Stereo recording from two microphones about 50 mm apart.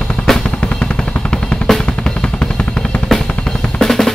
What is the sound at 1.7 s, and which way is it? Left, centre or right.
Drum kit, centre.